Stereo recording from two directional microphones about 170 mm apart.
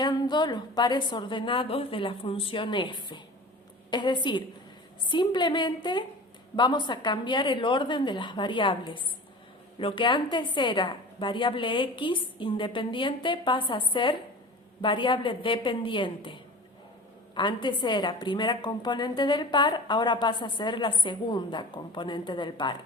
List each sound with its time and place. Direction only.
0.0 s a woman's voice: 25° left (ahead or behind)